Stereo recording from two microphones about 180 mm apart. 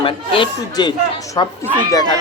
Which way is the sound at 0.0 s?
25° left (ahead or behind).